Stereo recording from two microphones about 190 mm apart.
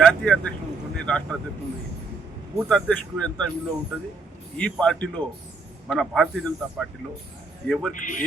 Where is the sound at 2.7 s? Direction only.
5° left (ahead or behind).